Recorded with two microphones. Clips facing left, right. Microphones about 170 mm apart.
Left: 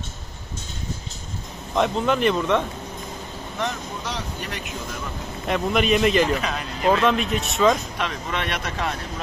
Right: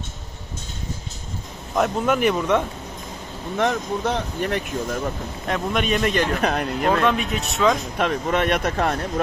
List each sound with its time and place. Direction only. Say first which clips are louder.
1.8 s speech: right 1 dB; 5° right (ahead or behind)
3.5 s speech: right 7 dB; 55° right (ahead or behind)
5.5 s a man's voice: left 2 dB; 5° left (ahead or behind)
6.4 s speech: right 5 dB; 55° right (ahead or behind)
7.1 s a man's voice: even; centre (ahead or behind)
8.0 s speech: right 6 dB; 50° right (ahead or behind)